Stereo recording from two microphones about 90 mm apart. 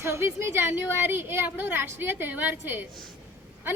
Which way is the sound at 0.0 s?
30° right (ahead or behind).